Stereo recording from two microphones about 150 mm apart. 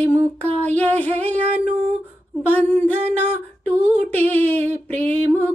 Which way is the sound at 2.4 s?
10° left (ahead or behind).